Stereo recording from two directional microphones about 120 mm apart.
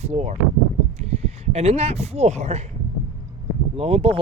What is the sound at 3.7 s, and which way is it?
Speech, 55° right (ahead or behind).